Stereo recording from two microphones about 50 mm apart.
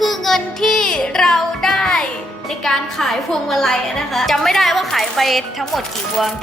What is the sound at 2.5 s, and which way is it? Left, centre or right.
A woman's voice, centre.